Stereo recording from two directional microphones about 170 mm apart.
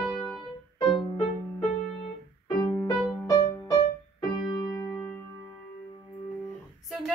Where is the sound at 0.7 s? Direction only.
25° left (ahead or behind).